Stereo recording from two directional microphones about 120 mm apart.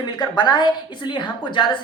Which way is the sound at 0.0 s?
35° left (ahead or behind).